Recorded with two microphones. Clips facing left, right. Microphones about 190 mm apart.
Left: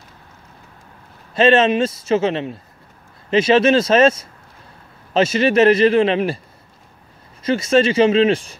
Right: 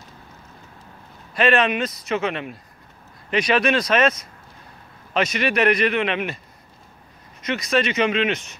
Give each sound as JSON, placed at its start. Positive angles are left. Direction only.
{"t": 1.3, "sound": "a man's voice", "side_deg": 25}
{"t": 7.4, "sound": "a man's voice", "side_deg": 30}